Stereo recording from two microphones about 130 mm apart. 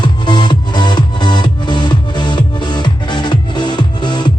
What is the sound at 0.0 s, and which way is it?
Music, 35° left (ahead or behind).